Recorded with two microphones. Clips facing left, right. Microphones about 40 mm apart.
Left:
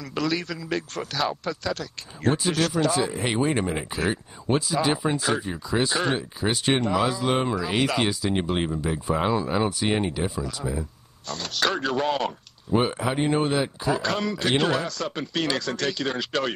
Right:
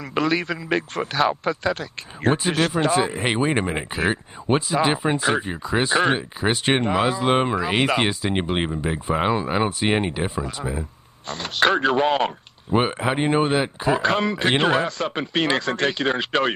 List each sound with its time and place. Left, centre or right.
0.1 s a man's voice: right